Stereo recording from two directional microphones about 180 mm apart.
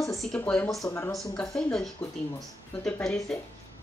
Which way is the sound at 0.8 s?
15° left (ahead or behind).